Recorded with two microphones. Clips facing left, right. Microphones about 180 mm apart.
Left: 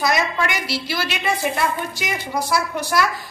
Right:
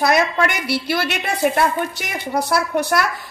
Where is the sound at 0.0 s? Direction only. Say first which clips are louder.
Right 4 dB; 55° right (ahead or behind).